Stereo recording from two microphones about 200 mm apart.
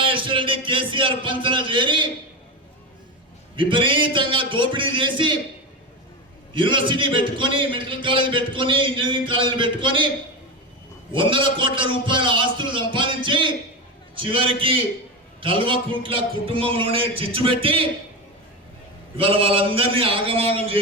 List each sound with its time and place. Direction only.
0.0 s a man's voice: 25° right (ahead or behind)
3.5 s a man's voice: 25° right (ahead or behind)
6.5 s a man's voice: 25° right (ahead or behind)
11.1 s a man's voice: 25° right (ahead or behind)
19.1 s a man's voice: 25° right (ahead or behind)